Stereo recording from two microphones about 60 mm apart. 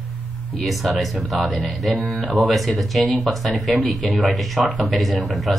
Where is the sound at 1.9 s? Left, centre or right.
Right.